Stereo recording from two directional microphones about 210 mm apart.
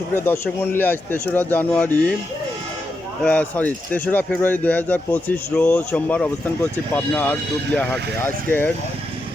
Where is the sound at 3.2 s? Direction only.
5° left (ahead or behind).